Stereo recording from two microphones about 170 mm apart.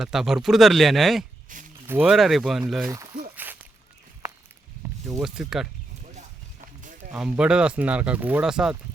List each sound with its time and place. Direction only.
0.0 s speech: centre (ahead or behind)
1.5 s speech: 50° right (ahead or behind)
1.9 s speech: 5° right (ahead or behind)
2.9 s a sound: 20° right (ahead or behind)
5.2 s speech: 5° right (ahead or behind)
7.1 s speech: 5° right (ahead or behind)